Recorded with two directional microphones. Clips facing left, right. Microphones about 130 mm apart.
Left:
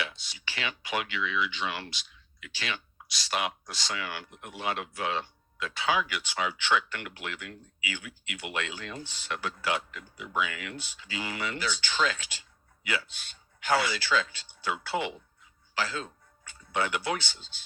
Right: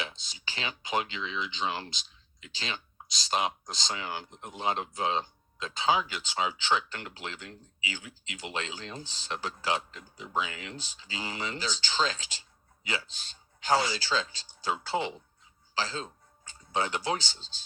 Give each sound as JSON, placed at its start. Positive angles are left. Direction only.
{"t": 0.3, "sound": "speech", "side_deg": -25}